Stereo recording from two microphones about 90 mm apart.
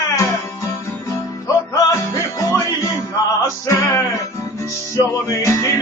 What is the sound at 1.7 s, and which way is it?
Music, 35° left (ahead or behind).